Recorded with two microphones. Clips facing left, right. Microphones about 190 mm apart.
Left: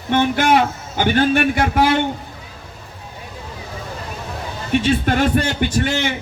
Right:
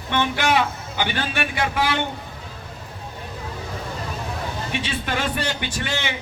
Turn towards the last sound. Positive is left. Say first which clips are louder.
# left 8 dB
turn(degrees=50)  # may be behind; listen again after turning